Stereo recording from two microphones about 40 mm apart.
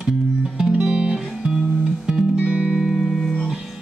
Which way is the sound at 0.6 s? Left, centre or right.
Right.